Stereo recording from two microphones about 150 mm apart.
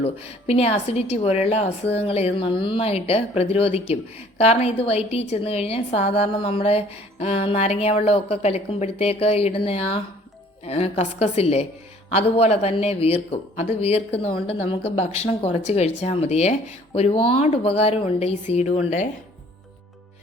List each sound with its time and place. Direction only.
0.0 s a man's voice: 40° left (ahead or behind)